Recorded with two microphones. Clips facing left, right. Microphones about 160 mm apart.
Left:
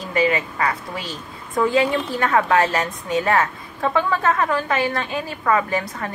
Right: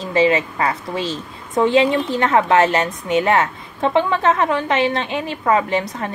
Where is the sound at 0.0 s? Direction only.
25° right (ahead or behind).